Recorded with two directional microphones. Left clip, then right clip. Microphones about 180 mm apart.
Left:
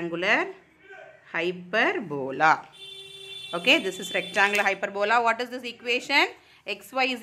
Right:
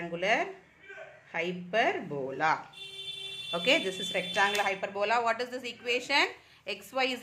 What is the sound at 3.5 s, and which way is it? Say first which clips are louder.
A woman's voice: left 5 dB; 30° left (ahead or behind).